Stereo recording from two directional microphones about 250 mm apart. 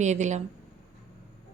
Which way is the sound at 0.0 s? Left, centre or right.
Right.